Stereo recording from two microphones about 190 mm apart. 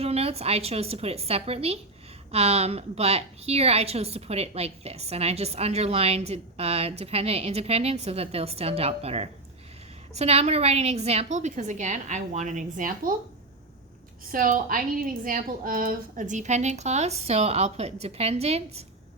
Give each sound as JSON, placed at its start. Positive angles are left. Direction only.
{"t": 0.0, "sound": "a woman's voice", "side_deg": -30}
{"t": 14.3, "sound": "a woman's voice", "side_deg": -45}